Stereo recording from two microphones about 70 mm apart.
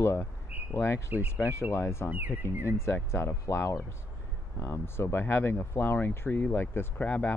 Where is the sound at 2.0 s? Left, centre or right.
Right.